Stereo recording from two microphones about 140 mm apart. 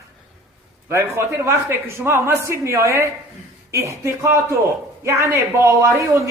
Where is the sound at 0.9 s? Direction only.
20° right (ahead or behind).